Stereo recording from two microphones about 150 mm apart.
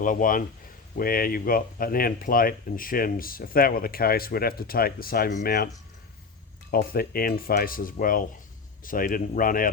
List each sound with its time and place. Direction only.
0.0 s speech: 60° left (ahead or behind)
0.9 s speech: 75° left (ahead or behind)
6.7 s speech: 80° left